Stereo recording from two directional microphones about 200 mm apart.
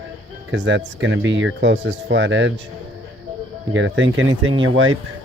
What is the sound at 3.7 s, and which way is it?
Speech, 70° right (ahead or behind).